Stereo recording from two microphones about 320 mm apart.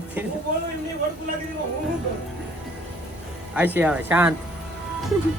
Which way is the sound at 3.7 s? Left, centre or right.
Centre.